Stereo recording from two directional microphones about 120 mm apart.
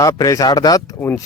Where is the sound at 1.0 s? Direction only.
15° left (ahead or behind).